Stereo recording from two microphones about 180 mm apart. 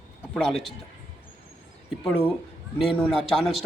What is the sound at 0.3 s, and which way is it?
Speech, 5° left (ahead or behind).